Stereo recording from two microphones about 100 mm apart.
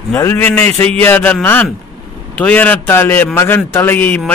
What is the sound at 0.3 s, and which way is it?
A man's voice, 20° left (ahead or behind).